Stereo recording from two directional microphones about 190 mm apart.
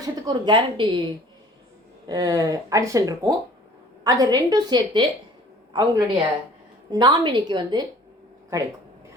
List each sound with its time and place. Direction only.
0.0 s speech: 20° right (ahead or behind)
2.0 s a woman's voice: 20° right (ahead or behind)